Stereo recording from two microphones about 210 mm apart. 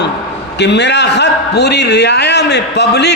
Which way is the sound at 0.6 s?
55° left (ahead or behind).